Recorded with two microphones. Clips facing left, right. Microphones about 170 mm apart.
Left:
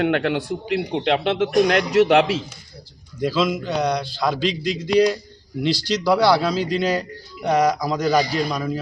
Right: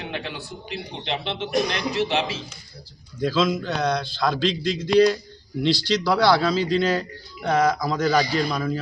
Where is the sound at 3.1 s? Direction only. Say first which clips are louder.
Left 1 dB; 10° left (ahead or behind).